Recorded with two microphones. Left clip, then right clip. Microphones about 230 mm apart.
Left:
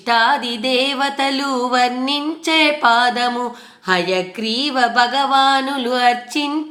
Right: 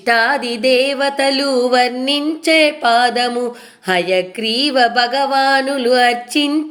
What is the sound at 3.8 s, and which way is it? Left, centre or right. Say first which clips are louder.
Music: right 2 dB; centre.